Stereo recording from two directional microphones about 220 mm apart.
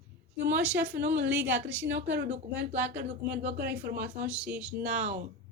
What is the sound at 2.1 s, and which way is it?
Speech, 45° right (ahead or behind).